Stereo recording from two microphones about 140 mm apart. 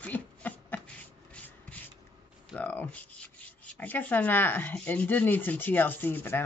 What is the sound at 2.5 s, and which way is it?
Speech, 10° left (ahead or behind).